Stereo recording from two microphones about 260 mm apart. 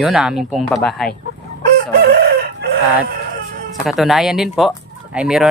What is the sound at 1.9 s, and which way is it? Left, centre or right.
Chicken, right.